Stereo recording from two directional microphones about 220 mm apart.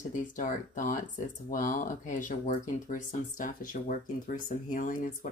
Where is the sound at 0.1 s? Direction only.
35° left (ahead or behind).